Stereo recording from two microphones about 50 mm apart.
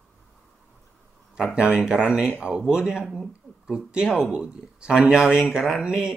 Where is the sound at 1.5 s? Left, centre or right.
Centre.